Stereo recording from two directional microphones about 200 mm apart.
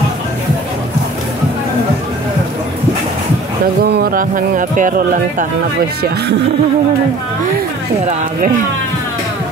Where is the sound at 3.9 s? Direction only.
45° right (ahead or behind).